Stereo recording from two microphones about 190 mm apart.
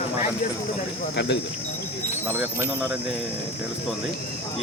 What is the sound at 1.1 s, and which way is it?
Speech, 65° left (ahead or behind).